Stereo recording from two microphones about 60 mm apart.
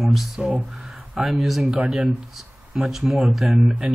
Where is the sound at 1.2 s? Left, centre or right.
Centre.